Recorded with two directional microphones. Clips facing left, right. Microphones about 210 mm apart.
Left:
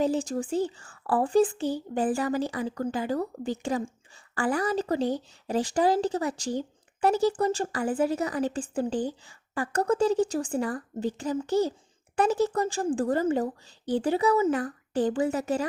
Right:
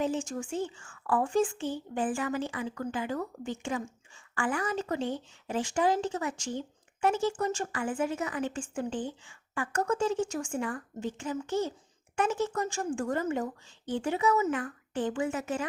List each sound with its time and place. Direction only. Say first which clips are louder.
0.0 s speech: left 5 dB; 35° left (ahead or behind)